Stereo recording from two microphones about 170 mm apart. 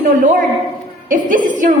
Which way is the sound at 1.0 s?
50° right (ahead or behind).